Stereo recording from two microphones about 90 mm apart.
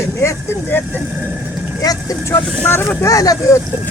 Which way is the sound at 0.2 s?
30° left (ahead or behind).